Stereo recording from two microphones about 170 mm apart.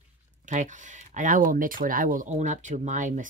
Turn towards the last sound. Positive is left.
turn(degrees=-50)  # may be behind; listen again after turning